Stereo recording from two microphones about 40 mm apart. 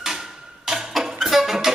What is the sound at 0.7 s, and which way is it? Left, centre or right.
Music, centre.